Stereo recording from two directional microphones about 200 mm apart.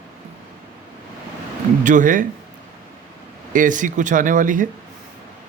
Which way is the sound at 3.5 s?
40° right (ahead or behind).